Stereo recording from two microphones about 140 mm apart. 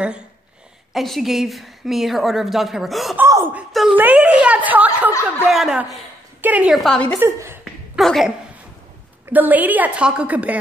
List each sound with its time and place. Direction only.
0.9 s a woman's voice: centre (ahead or behind)
3.2 s a woman's voice: 15° right (ahead or behind)
3.5 s a woman's voice: 5° right (ahead or behind)
6.8 s a woman's voice: 5° left (ahead or behind)
7.2 s a woman's voice: 20° right (ahead or behind)
7.9 s speech: centre (ahead or behind)
9.3 s a woman's voice: 10° right (ahead or behind)